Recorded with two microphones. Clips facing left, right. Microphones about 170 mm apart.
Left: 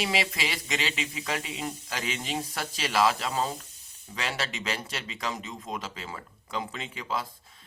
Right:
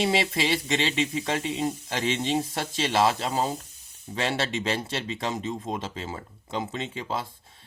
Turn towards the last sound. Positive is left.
turn(degrees=-25)  # may be behind; listen again after turning